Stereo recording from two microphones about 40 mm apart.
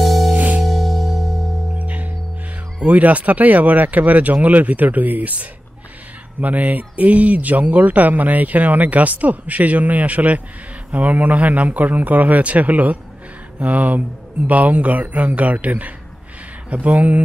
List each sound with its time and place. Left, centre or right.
0.0 s music: centre
0.3 s music: right
0.7 s music: centre
1.8 s music: right
2.9 s speech: right